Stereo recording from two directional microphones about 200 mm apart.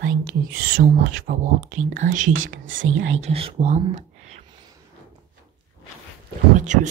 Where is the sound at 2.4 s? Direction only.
70° right (ahead or behind).